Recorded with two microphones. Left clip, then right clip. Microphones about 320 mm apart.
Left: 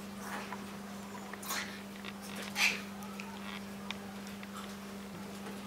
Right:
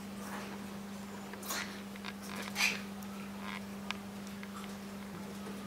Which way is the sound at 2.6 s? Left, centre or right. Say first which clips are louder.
Left 2 dB; centre.